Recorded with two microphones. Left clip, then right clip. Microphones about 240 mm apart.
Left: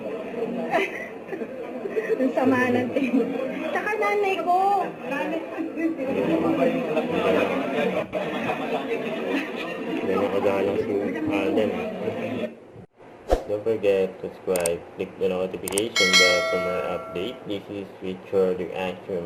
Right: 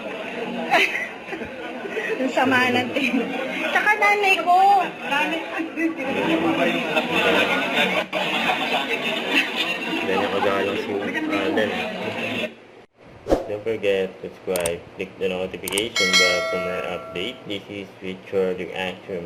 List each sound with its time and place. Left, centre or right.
0.1 s chatter: centre
1.9 s chuckle: centre
4.7 s a man's voice: centre
11.8 s a sound: centre
13.2 s a sound: centre
14.5 s speech: centre